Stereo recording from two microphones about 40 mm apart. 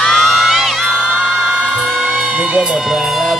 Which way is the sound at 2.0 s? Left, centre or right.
Centre.